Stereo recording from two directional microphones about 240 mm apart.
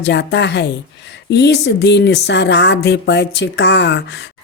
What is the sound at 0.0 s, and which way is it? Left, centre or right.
Speech, left.